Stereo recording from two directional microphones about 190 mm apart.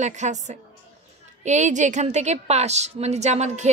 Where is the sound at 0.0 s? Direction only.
40° right (ahead or behind).